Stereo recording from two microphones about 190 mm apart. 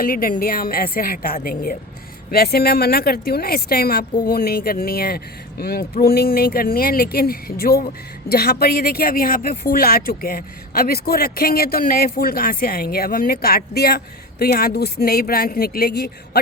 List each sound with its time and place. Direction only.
0.0 s speech: 50° left (ahead or behind)